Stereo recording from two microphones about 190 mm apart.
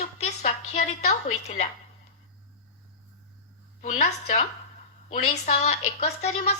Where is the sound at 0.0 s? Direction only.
35° left (ahead or behind).